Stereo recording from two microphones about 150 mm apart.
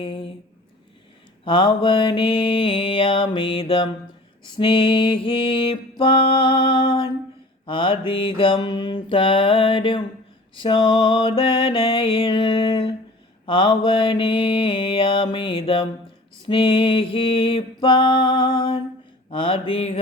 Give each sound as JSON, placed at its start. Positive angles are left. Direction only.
{"t": 0.0, "sound": "mantra", "side_deg": 35}
{"t": 1.5, "sound": "mantra", "side_deg": 35}